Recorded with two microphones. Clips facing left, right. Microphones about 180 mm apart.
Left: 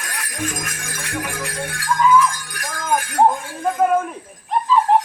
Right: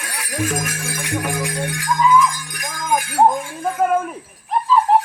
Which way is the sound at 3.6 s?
5° right (ahead or behind).